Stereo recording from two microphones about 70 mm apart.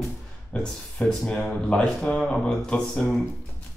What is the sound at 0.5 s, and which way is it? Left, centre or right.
Speech, centre.